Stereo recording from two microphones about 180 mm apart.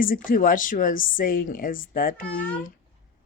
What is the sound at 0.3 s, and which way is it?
Speech, 50° left (ahead or behind).